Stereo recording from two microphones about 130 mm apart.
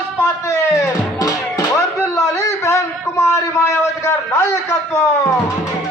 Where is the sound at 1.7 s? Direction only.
20° left (ahead or behind).